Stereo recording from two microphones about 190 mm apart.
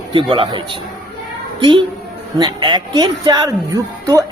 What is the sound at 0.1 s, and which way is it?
Speech, 25° right (ahead or behind).